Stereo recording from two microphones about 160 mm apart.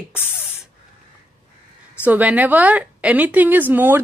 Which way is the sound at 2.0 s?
10° right (ahead or behind).